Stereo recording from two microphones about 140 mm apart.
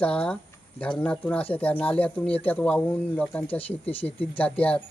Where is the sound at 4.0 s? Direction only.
40° left (ahead or behind).